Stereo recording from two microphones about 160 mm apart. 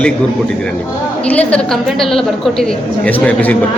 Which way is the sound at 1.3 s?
5° left (ahead or behind).